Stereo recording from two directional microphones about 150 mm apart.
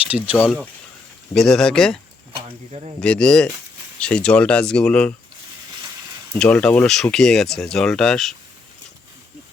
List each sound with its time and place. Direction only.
0.3 s speech: centre (ahead or behind)
2.5 s speech: 40° right (ahead or behind)
3.0 s speech: 5° left (ahead or behind)
6.4 s speech: 5° left (ahead or behind)